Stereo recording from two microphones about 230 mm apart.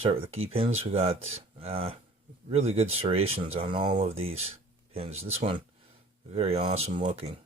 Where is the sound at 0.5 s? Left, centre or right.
Right.